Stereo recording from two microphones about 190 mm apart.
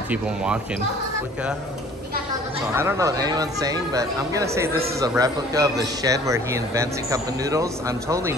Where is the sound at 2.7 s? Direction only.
15° right (ahead or behind).